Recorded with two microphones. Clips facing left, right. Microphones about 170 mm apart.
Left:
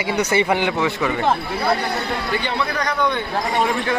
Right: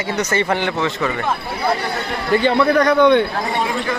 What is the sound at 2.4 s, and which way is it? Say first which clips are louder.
Speech: right 9 dB; 50° right (ahead or behind).